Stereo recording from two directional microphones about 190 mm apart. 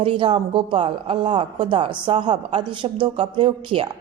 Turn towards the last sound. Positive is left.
turn(degrees=-25)  # may be behind; listen again after turning